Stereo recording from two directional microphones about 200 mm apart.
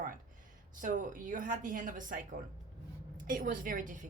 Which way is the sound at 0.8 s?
40° right (ahead or behind).